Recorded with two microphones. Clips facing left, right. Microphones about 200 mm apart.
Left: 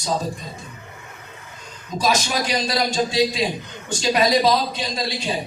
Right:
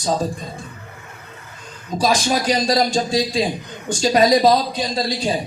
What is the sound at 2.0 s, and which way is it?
A man's voice, 35° right (ahead or behind).